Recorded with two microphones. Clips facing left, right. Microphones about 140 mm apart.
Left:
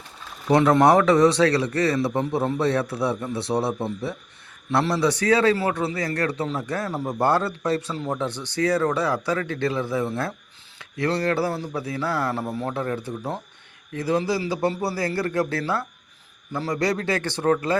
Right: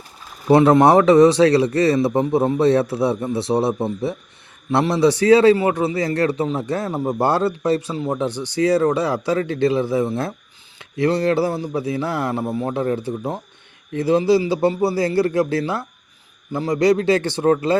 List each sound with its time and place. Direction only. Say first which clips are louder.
0.5 s speech: right 4 dB; 25° right (ahead or behind)